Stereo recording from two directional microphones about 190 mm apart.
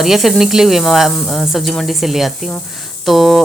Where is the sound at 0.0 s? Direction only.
Centre (ahead or behind).